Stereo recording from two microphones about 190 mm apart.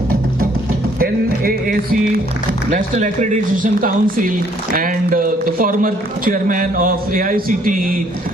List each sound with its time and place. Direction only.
0.9 s music: 50° right (ahead or behind)
2.7 s speech: 40° right (ahead or behind)